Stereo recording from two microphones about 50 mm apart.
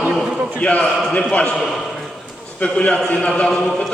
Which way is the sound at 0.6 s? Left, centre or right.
Left.